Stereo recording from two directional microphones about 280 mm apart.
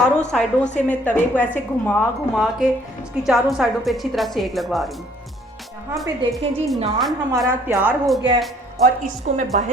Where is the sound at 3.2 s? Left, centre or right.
Centre.